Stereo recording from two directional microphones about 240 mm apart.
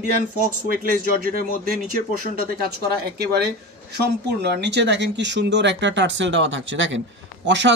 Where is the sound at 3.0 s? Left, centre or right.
Right.